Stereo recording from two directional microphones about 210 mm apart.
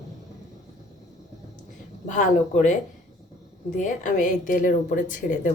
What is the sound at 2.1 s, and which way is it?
Speech, 35° left (ahead or behind).